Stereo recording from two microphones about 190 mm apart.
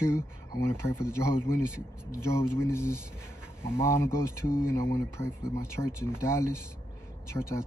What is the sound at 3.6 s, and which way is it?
Speech, 15° left (ahead or behind).